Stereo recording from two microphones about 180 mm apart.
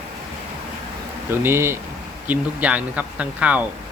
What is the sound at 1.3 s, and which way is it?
Speech, 10° right (ahead or behind).